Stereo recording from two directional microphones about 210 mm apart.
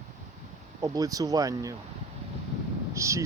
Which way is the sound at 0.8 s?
15° right (ahead or behind).